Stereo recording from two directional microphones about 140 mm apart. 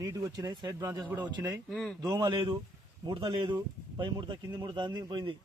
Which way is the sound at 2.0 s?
25° right (ahead or behind).